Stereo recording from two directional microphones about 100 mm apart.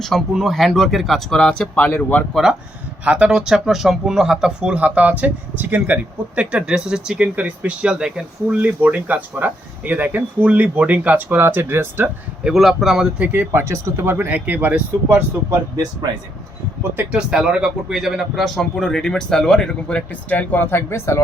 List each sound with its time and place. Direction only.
0.0 s a man's voice: centre (ahead or behind)
3.0 s speech: 10° right (ahead or behind)
12.5 s a man's voice: 5° right (ahead or behind)
13.1 s speech: 15° right (ahead or behind)
15.7 s speech: 40° right (ahead or behind)
17.0 s a man's voice: 10° right (ahead or behind); by 21.2 s 25° left (ahead or behind)